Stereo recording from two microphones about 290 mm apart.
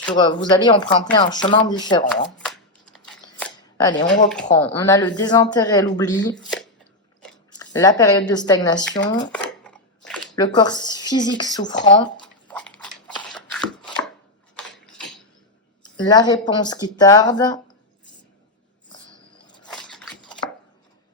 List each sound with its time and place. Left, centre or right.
0.2 s speech: centre
2.2 s shuffling cards: centre
4.5 s speech: centre
6.3 s speech: centre
7.5 s speech: centre
9.3 s a sound: centre
10.3 s speech: centre
12.2 s a sound: centre
16.0 s speech: centre
19.6 s chopping: centre